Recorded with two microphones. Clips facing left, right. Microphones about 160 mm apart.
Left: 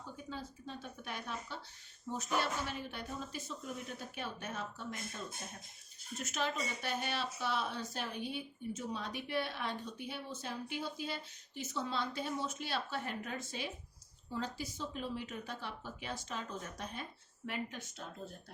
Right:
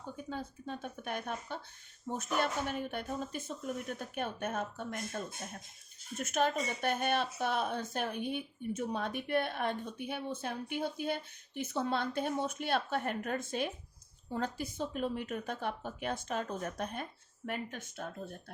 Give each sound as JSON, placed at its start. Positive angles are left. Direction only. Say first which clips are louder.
{"t": 0.3, "sound": "speech", "louder": "right 5 dB", "side_deg": -55}